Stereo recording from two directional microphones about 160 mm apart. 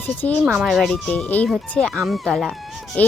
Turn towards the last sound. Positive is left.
turn(degrees=10)  # may be behind; listen again after turning